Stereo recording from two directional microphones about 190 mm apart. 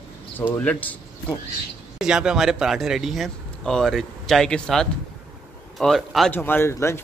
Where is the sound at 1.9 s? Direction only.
5° right (ahead or behind).